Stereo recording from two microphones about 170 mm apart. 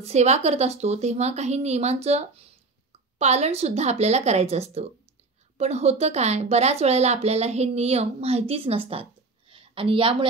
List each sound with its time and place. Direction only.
0.0 s a woman's voice: 40° right (ahead or behind)